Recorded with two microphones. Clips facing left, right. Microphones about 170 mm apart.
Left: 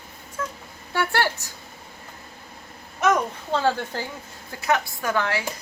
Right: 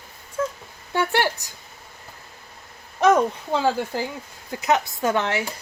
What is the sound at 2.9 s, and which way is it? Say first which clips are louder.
Speech: right 4 dB; 30° right (ahead or behind).